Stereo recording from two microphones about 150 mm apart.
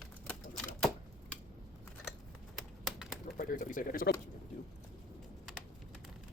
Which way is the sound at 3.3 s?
65° left (ahead or behind).